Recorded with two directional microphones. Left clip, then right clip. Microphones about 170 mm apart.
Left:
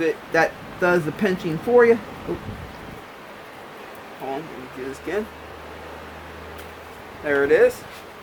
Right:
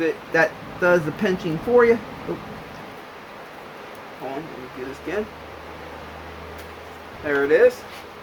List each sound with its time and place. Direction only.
0.0 s speech: 35° left (ahead or behind)
5.1 s speech: 35° left (ahead or behind)
7.3 s speech: 35° left (ahead or behind)